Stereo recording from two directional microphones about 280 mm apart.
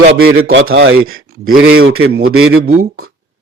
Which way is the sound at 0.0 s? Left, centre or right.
Right.